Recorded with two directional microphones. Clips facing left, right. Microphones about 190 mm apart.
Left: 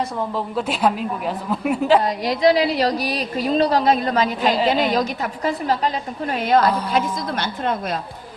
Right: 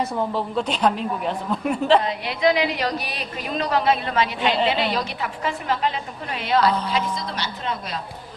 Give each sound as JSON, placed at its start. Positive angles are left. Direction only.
{"t": 0.2, "sound": "a woman's voice", "side_deg": 0}
{"t": 2.0, "sound": "a woman's voice", "side_deg": 40}